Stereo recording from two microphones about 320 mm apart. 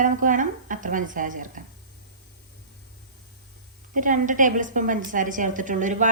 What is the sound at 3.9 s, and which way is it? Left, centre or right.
A woman's voice, right.